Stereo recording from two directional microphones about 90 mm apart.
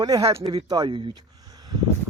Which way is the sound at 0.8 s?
70° right (ahead or behind).